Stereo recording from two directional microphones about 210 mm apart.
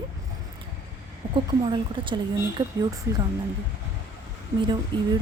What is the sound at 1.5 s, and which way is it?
Speech, 20° right (ahead or behind).